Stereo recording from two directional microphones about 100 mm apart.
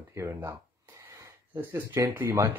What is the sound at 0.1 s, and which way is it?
Speech, 30° right (ahead or behind).